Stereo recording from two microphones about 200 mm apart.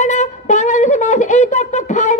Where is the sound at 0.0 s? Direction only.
40° left (ahead or behind).